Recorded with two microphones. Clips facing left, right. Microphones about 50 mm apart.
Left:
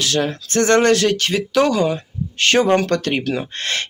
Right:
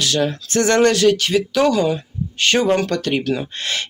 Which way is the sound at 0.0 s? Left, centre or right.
Left.